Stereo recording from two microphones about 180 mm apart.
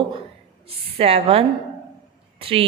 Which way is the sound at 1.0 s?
30° right (ahead or behind).